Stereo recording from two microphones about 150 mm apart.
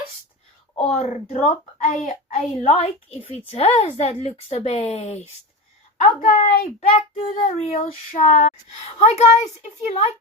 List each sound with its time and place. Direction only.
0.9 s a child's voice: 50° left (ahead or behind)
1.8 s a child's voice: 60° left (ahead or behind)
6.0 s a child's voice: 55° left (ahead or behind)